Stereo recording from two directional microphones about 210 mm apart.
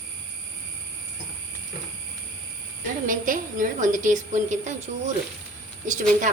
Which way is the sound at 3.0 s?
40° right (ahead or behind).